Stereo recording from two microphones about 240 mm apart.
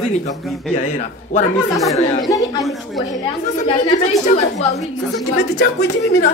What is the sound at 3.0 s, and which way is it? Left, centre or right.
A woman's voice, left.